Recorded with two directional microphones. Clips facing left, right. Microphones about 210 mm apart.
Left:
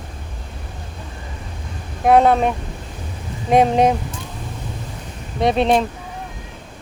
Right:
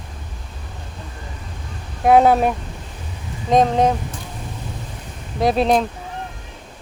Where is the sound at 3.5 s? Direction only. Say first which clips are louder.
Left 1 dB; 10° left (ahead or behind).